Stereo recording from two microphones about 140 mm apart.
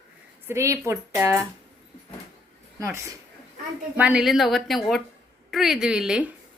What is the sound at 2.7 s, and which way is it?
Speech, 20° right (ahead or behind).